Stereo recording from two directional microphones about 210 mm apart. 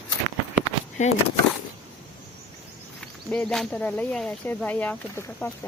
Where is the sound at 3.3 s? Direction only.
5° left (ahead or behind).